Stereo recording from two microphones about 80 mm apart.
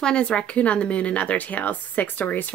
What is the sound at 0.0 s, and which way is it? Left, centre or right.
Speech, centre.